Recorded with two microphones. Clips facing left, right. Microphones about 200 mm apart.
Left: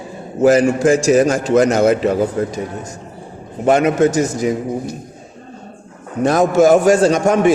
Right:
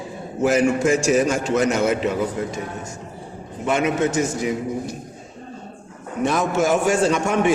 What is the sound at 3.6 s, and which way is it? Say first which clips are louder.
Speech: left 7 dB; 40° left (ahead or behind).